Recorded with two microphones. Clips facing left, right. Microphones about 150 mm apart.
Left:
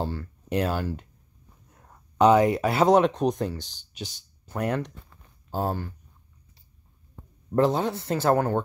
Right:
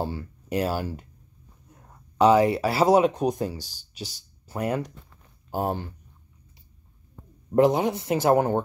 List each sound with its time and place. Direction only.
0.0 s speech: 10° right (ahead or behind)
5.5 s speech: 15° right (ahead or behind)
7.5 s speech: 15° right (ahead or behind)